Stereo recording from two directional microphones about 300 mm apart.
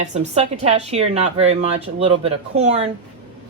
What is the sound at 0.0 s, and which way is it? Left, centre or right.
A woman's voice, right.